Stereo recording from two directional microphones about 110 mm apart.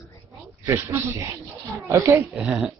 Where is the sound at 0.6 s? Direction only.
25° right (ahead or behind).